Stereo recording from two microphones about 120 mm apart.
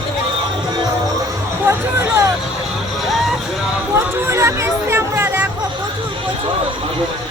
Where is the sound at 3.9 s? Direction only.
20° right (ahead or behind).